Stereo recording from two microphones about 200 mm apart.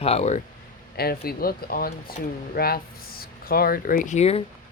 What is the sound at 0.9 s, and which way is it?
Speech, 50° left (ahead or behind).